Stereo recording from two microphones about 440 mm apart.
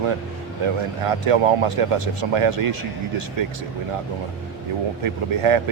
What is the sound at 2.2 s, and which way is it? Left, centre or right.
Speech, right.